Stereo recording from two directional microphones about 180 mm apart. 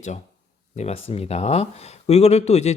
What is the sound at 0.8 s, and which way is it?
Speech, 35° left (ahead or behind).